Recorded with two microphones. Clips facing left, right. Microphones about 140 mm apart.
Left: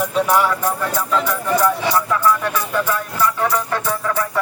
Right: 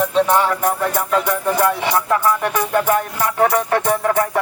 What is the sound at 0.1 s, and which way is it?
Speech, 25° right (ahead or behind).